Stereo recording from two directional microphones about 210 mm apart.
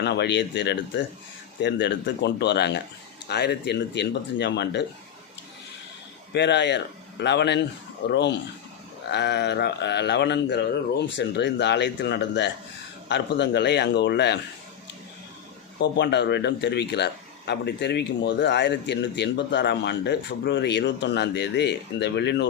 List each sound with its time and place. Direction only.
0.0 s a man's voice: 55° left (ahead or behind)
6.3 s a man's voice: 55° left (ahead or behind)
15.8 s a man's voice: 55° left (ahead or behind)